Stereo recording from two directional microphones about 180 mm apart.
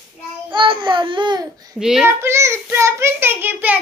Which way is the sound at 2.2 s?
15° right (ahead or behind).